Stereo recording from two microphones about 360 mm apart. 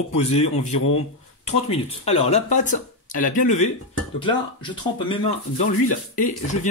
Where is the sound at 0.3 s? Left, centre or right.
Centre.